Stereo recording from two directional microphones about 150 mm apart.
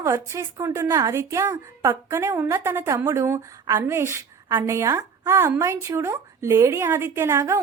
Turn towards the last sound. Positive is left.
turn(degrees=-15)  # may be behind; listen again after turning